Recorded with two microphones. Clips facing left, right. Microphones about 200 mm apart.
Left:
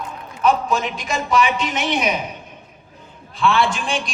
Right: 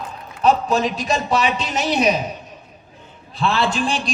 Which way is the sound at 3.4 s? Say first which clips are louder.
Left 1 dB; 35° right (ahead or behind).